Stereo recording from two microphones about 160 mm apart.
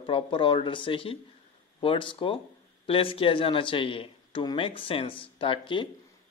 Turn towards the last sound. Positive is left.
turn(degrees=30)  # may be behind; listen again after turning